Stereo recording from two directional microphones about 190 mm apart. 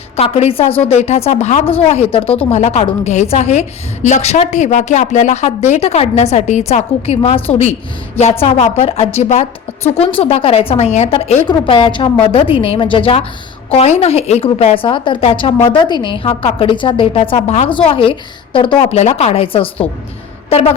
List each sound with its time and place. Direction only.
0.2 s a woman's voice: 30° left (ahead or behind)